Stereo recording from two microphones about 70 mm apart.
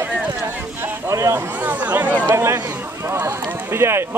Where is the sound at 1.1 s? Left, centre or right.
Right.